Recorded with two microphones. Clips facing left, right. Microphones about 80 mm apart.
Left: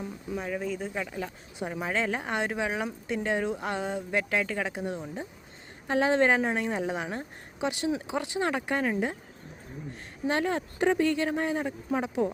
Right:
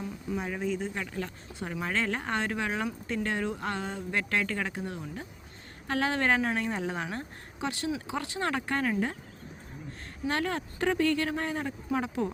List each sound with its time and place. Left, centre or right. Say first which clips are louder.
0.3 s a woman's voice: even; centre
10.2 s speech: left 3 dB; centre